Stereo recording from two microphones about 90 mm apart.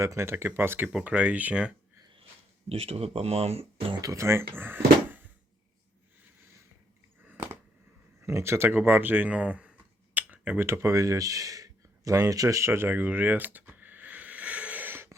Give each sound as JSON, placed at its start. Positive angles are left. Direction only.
{"t": 0.0, "sound": "speech", "side_deg": -30}
{"t": 1.0, "sound": "speech", "side_deg": -15}
{"t": 2.6, "sound": "speech", "side_deg": -90}
{"t": 4.1, "sound": "speech", "side_deg": -30}
{"t": 8.2, "sound": "speech", "side_deg": -30}
{"t": 10.2, "sound": "tick-tock", "side_deg": -15}
{"t": 10.7, "sound": "a sound", "side_deg": -30}